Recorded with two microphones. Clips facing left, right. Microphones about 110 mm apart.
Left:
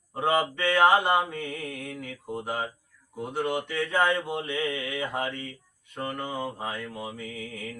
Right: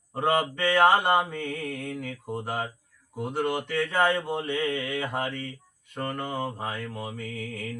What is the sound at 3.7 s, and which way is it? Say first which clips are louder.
Speech: right 1 dB; 10° right (ahead or behind).